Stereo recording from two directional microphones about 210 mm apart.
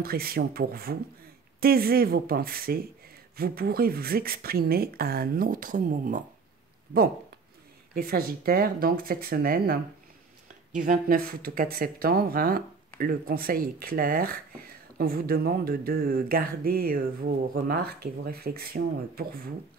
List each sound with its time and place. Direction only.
0.0 s speech: 45° right (ahead or behind)
7.9 s speech: 45° right (ahead or behind)
10.8 s speech: 40° right (ahead or behind)